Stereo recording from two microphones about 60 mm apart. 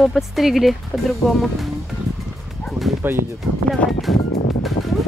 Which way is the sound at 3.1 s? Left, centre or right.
Right.